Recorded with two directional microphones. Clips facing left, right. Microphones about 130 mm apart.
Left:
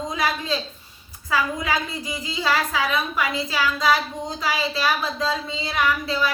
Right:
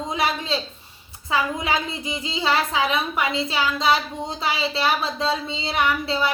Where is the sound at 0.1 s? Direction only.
25° right (ahead or behind).